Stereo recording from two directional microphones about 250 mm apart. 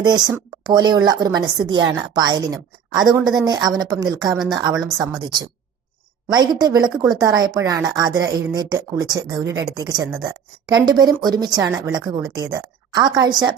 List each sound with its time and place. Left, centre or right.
0.0 s speech: centre